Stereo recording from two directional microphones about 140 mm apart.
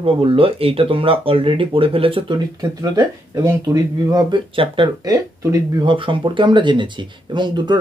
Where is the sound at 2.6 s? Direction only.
25° right (ahead or behind).